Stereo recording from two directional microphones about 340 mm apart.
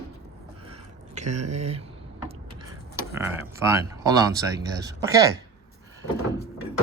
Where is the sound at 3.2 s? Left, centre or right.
Centre.